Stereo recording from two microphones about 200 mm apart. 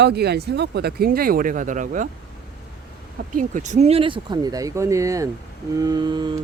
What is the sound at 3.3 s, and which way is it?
Speech, 40° right (ahead or behind).